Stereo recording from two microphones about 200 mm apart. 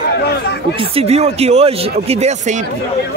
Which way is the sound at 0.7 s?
30° right (ahead or behind).